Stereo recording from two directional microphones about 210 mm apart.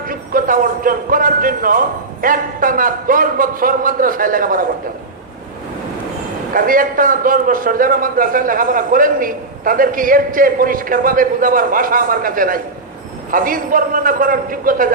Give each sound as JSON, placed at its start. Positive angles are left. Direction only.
{"t": 0.1, "sound": "a man's voice", "side_deg": -40}
{"t": 6.5, "sound": "a man's voice", "side_deg": -40}